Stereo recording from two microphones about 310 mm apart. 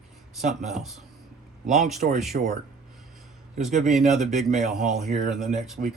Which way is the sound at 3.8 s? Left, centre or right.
Centre.